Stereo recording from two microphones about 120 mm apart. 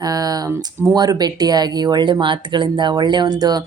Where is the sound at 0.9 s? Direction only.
35° right (ahead or behind).